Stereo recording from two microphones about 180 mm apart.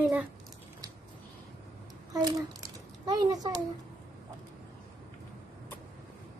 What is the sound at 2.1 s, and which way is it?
A child's voice, 20° right (ahead or behind).